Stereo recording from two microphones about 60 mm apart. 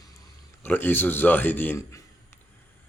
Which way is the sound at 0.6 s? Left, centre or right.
Left.